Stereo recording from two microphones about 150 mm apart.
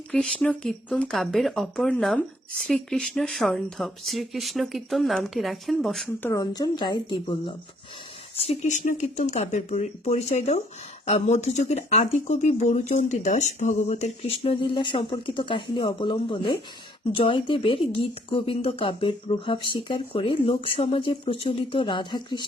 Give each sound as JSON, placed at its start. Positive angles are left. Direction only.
{"t": 0.1, "sound": "speech", "side_deg": 10}
{"t": 6.2, "sound": "speech", "side_deg": 20}
{"t": 8.4, "sound": "speech", "side_deg": 50}